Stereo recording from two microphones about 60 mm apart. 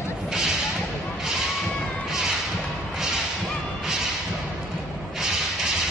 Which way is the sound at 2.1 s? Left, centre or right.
Centre.